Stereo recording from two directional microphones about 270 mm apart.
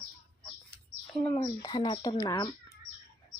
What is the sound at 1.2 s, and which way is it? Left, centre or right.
Speech, centre.